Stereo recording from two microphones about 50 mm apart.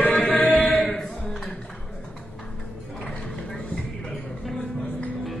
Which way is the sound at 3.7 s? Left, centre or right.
Centre.